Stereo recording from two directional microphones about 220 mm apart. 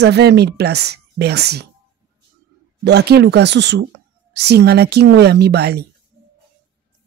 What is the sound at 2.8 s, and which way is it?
A woman's voice, 50° right (ahead or behind).